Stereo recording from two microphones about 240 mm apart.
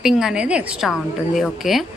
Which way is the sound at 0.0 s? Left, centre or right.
Centre.